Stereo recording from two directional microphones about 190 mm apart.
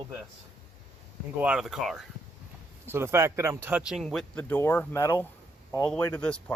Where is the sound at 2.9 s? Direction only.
15° right (ahead or behind).